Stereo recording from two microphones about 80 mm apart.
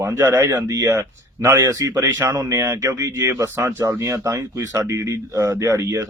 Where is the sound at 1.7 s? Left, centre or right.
Right.